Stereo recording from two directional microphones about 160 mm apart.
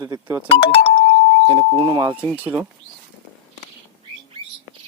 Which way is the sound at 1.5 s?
30° right (ahead or behind).